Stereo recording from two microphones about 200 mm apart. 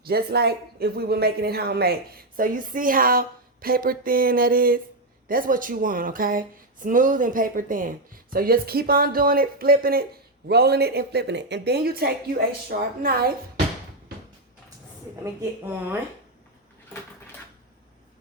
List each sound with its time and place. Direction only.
0.0 s speech: 50° right (ahead or behind)
15.2 s speech: 10° right (ahead or behind)